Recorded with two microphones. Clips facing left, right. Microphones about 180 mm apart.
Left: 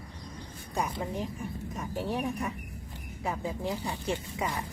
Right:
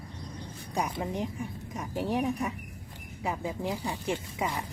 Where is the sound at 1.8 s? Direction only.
15° right (ahead or behind).